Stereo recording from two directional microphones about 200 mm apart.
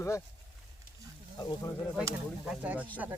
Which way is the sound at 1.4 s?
10° left (ahead or behind).